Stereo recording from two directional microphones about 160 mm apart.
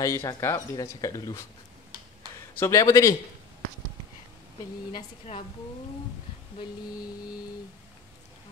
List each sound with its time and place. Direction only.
0.0 s a man's voice: 20° left (ahead or behind)
2.6 s a man's voice: 20° left (ahead or behind)
4.9 s speech: 40° left (ahead or behind)